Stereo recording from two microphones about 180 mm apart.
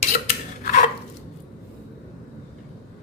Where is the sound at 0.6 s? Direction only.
50° left (ahead or behind).